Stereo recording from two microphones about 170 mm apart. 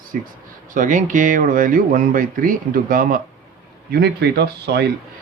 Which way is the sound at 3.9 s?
70° right (ahead or behind).